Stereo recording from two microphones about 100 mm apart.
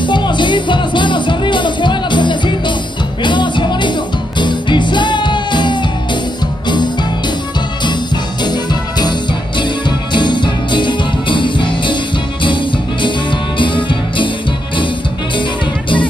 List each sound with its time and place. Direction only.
0.0 s music: 50° left (ahead or behind)
9.6 s music: 50° left (ahead or behind)
13.0 s music: 55° left (ahead or behind)